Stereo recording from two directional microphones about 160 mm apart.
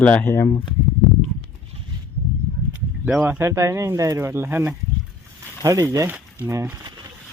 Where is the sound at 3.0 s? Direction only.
10° right (ahead or behind).